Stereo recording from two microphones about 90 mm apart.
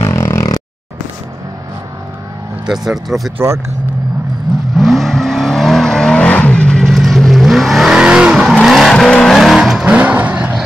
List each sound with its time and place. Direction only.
0.0 s a sound: 35° left (ahead or behind)
2.6 s speech: 5° right (ahead or behind)
3.3 s speech: 30° right (ahead or behind)
4.7 s vehicle: centre (ahead or behind)
9.9 s vehicle: 15° right (ahead or behind)